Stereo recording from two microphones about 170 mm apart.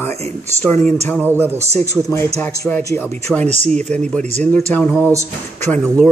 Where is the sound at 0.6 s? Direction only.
10° left (ahead or behind).